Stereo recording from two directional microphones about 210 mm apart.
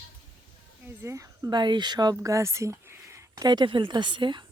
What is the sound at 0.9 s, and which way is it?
Speech, 15° right (ahead or behind).